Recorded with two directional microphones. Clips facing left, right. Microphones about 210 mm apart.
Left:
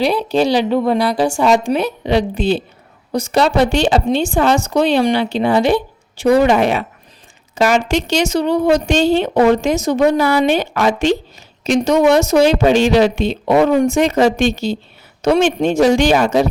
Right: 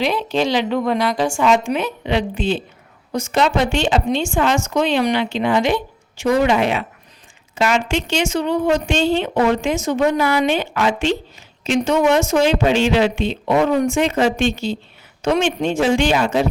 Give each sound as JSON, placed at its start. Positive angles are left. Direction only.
{"t": 0.0, "sound": "a woman's voice", "side_deg": 35}